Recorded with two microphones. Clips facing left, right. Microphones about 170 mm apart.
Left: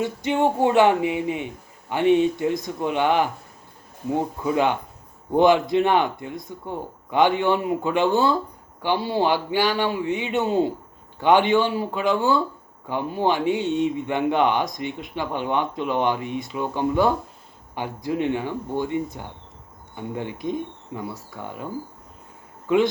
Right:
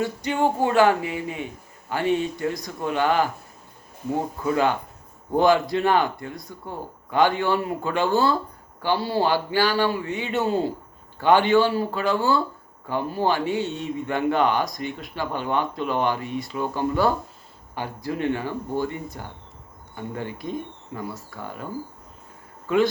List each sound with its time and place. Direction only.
0.0 s a man's voice: 20° left (ahead or behind)
4.4 s a man's voice: 20° left (ahead or behind)